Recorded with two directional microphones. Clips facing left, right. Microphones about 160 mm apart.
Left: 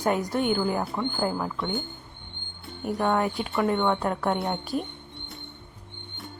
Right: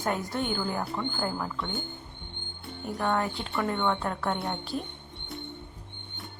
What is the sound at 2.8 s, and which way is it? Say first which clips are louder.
Speech: left 4 dB; 15° left (ahead or behind).